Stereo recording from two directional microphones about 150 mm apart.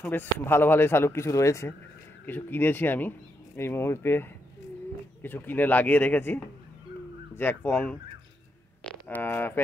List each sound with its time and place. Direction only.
0.0 s speech: 15° left (ahead or behind)
9.0 s speech: 10° left (ahead or behind)